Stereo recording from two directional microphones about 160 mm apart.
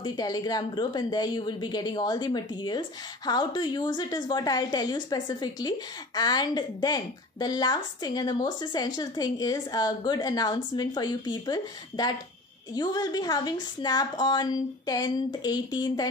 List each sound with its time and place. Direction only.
0.0 s a woman's voice: 25° left (ahead or behind)